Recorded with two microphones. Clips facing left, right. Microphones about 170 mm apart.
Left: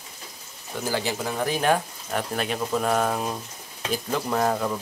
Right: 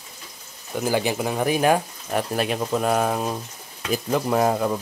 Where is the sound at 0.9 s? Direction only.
15° right (ahead or behind).